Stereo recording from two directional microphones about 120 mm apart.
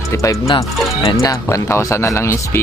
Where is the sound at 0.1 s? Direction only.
25° left (ahead or behind).